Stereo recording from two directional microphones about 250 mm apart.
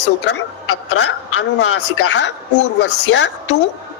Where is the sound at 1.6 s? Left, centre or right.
Left.